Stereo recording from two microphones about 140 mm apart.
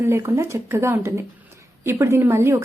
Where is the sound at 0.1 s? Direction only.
20° right (ahead or behind).